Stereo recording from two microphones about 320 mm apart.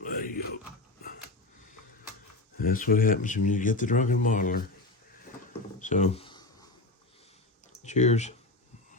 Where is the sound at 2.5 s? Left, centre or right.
Left.